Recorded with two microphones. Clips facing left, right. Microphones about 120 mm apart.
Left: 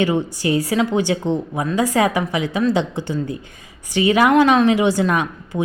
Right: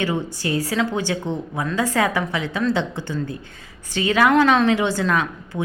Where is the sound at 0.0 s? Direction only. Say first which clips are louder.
Left 5 dB; 15° left (ahead or behind).